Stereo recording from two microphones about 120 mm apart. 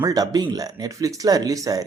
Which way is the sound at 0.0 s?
30° right (ahead or behind).